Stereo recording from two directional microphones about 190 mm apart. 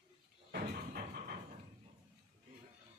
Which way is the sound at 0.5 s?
50° right (ahead or behind).